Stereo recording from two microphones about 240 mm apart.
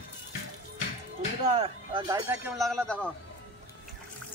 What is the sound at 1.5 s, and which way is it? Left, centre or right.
Speech, right.